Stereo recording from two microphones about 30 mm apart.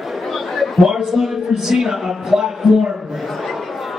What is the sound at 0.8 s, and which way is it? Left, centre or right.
A man's voice, centre.